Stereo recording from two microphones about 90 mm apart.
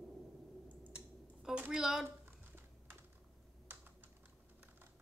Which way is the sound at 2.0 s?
25° right (ahead or behind).